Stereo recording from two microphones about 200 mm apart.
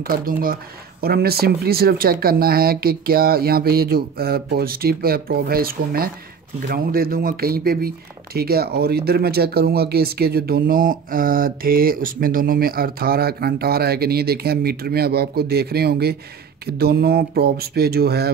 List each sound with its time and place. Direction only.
0.0 s speech: 45° right (ahead or behind)